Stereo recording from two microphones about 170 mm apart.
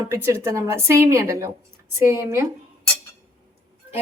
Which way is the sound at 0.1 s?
15° right (ahead or behind).